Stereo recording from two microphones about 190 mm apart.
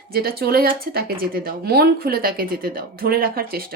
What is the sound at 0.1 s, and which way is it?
A woman's voice, 55° right (ahead or behind).